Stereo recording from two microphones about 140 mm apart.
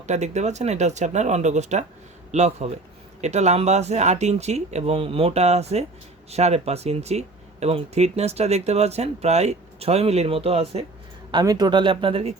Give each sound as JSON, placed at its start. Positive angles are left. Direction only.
{"t": 0.1, "sound": "speech", "side_deg": -55}
{"t": 11.3, "sound": "speech", "side_deg": -30}